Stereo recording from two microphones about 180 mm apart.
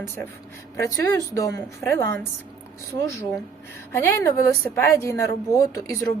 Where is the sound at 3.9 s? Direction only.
15° left (ahead or behind).